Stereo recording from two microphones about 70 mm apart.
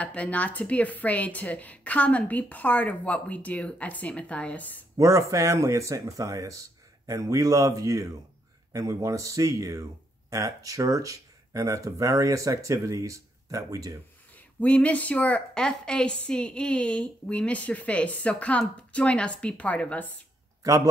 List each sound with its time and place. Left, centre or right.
0.0 s a woman's voice: centre
4.9 s speech: right
14.3 s a woman's voice: left
20.6 s a man's voice: right